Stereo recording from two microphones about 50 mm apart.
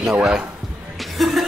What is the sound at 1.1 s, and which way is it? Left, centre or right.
Music, centre.